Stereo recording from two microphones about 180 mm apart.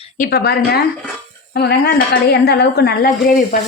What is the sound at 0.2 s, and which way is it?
A woman's voice, 65° left (ahead or behind).